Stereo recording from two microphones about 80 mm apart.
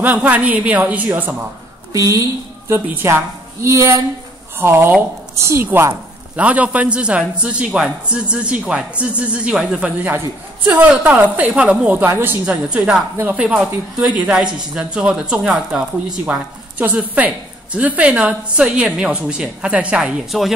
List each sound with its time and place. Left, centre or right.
0.0 s a woman's voice: right
1.9 s a woman's voice: right
2.7 s a woman's voice: right
6.3 s a man's voice: centre
12.4 s a man's voice: centre
13.2 s a man's voice: right; by 20.5 s centre